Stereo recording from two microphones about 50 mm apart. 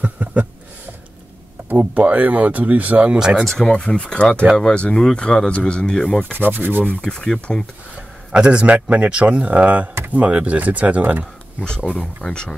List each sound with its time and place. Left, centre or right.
0.0 s a sound: right
1.7 s speech: right
3.2 s speech: centre
3.4 s speech: centre
3.8 s speech: left
6.3 s speech: right
7.0 s speech: centre
8.3 s speech: right
12.2 s speech: centre